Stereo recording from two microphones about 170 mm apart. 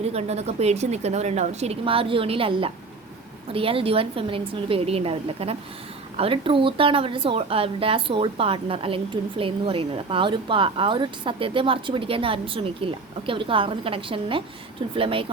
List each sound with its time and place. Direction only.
0.0 s speech: 40° right (ahead or behind)